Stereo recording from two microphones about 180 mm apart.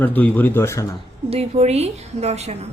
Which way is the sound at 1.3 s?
35° right (ahead or behind).